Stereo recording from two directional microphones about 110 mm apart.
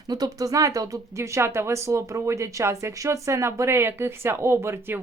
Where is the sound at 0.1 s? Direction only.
35° right (ahead or behind).